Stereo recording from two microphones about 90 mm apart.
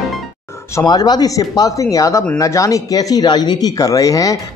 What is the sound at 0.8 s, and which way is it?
Speech, 50° left (ahead or behind).